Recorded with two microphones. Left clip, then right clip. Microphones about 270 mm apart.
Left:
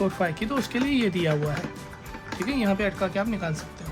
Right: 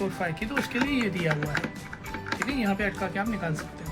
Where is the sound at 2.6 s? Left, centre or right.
Left.